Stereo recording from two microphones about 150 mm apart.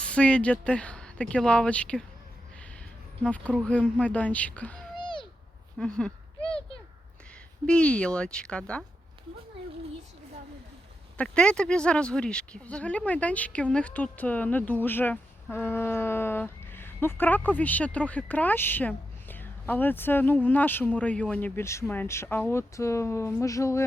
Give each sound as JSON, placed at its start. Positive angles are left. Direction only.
{"t": 0.0, "sound": "speech", "side_deg": 5}
{"t": 3.2, "sound": "speech", "side_deg": 10}
{"t": 4.9, "sound": "a sound", "side_deg": 30}
{"t": 5.8, "sound": "speech", "side_deg": 5}
{"t": 7.7, "sound": "speech", "side_deg": 5}
{"t": 11.2, "sound": "speech", "side_deg": 5}